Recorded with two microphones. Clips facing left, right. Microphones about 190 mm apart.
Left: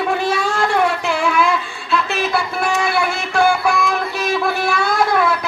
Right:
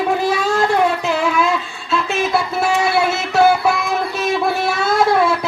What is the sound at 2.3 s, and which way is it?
Music, 25° right (ahead or behind).